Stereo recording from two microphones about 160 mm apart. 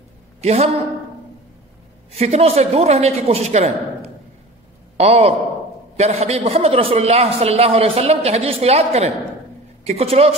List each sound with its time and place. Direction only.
0.4 s a woman's voice: 40° right (ahead or behind)
2.1 s a man's voice: 40° right (ahead or behind)
4.9 s a man's voice: 40° right (ahead or behind)